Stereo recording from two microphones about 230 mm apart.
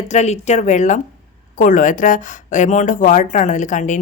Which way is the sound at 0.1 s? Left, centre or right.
Left.